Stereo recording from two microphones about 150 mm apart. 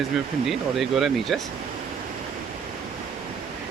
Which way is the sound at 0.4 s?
Centre (ahead or behind).